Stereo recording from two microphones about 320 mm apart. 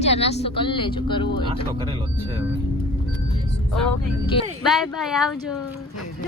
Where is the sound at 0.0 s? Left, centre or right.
Centre.